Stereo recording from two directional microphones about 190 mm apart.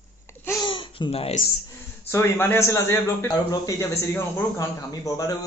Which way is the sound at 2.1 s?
15° left (ahead or behind).